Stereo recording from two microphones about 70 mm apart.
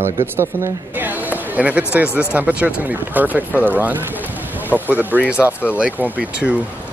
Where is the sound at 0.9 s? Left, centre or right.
Right.